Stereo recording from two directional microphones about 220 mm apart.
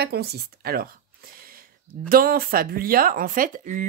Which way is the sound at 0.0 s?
45° right (ahead or behind).